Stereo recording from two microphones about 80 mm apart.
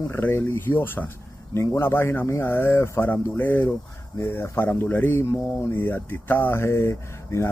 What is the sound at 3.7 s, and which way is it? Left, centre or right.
Speech, left.